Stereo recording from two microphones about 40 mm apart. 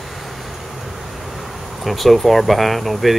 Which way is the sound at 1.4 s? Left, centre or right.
Centre.